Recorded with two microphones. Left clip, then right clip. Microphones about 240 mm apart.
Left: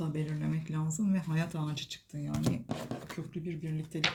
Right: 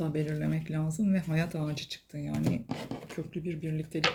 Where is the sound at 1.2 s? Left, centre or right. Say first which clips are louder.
Right 4 dB; left.